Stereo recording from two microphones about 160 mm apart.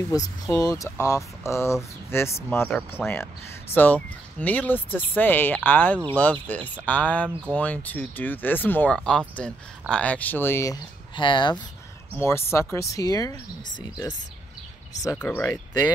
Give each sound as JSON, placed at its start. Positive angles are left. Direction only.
{"t": 0.1, "sound": "speech", "side_deg": 20}
{"t": 11.1, "sound": "speech", "side_deg": 30}
{"t": 12.2, "sound": "speech", "side_deg": 15}
{"t": 15.1, "sound": "speech", "side_deg": 10}